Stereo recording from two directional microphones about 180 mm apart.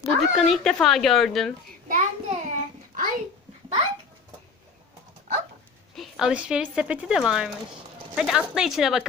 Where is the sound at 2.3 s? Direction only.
40° right (ahead or behind).